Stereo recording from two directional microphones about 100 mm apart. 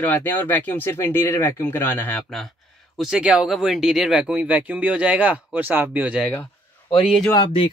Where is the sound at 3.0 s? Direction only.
10° right (ahead or behind).